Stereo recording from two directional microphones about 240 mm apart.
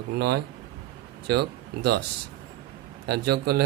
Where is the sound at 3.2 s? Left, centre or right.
Right.